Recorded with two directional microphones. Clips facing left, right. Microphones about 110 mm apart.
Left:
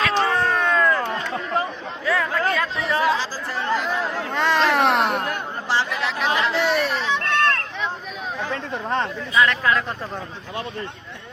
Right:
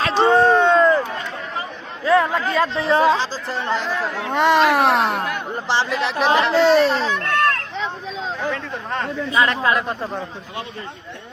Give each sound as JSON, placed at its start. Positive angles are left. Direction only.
{"t": 0.0, "sound": "a sound", "side_deg": -30}
{"t": 2.0, "sound": "speech", "side_deg": -25}
{"t": 4.3, "sound": "a child's voice", "side_deg": -15}
{"t": 4.9, "sound": "speech", "side_deg": 0}
{"t": 5.6, "sound": "speech", "side_deg": -25}
{"t": 9.3, "sound": "speech", "side_deg": -25}